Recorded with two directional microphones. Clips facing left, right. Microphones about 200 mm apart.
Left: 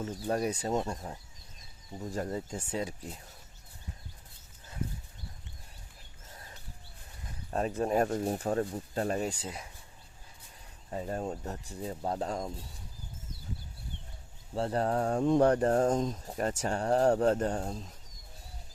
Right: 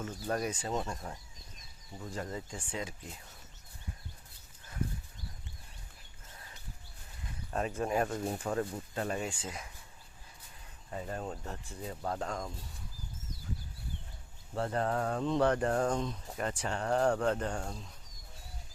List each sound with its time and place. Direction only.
0.0 s speech: 30° left (ahead or behind)
0.7 s speech: 25° left (ahead or behind)
2.0 s speech: 40° left (ahead or behind)
7.5 s speech: 35° left (ahead or behind)
10.9 s speech: 30° left (ahead or behind)
14.5 s speech: 30° left (ahead or behind)